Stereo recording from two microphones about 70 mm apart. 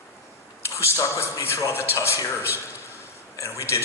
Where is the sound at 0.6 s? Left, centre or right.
Left.